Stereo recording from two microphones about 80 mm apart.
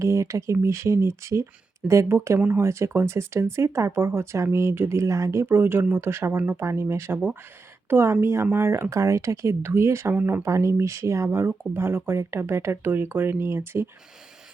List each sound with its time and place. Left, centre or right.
0.0 s speech: right
10.4 s speech: right